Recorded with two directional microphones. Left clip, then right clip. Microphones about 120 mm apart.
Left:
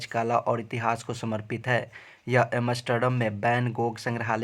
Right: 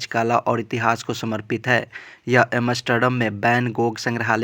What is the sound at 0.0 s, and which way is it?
Speech, 30° right (ahead or behind).